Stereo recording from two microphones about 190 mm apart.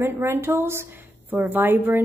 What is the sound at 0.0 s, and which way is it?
A woman's voice, 15° right (ahead or behind).